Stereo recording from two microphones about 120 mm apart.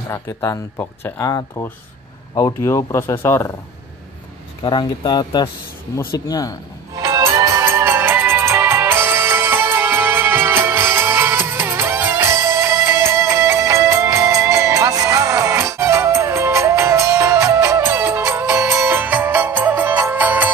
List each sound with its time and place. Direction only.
0.1 s speech: 25° left (ahead or behind)
4.6 s speech: 40° left (ahead or behind)
7.0 s music: 30° right (ahead or behind)